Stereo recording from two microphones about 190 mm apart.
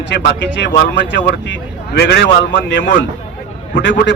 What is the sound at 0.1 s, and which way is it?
Speech, 65° left (ahead or behind).